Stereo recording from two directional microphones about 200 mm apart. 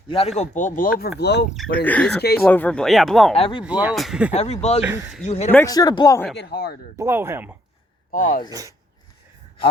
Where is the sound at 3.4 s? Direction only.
25° left (ahead or behind).